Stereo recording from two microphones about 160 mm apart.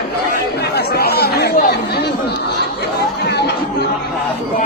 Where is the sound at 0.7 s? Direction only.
80° left.